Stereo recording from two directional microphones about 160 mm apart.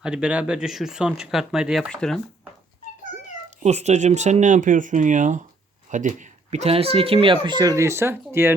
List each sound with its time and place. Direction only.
0.0 s speech: 5° right (ahead or behind)
3.6 s speech: 45° right (ahead or behind); by 8.5 s 15° right (ahead or behind)